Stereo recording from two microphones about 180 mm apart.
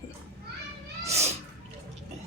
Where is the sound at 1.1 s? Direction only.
35° right (ahead or behind).